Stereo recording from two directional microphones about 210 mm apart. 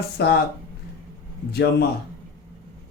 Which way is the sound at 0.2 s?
50° left (ahead or behind).